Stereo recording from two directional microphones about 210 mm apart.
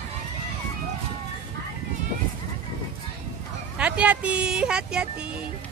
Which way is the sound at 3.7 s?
5° right (ahead or behind).